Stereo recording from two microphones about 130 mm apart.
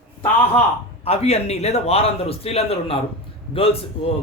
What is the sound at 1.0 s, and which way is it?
A man's voice, 50° left (ahead or behind).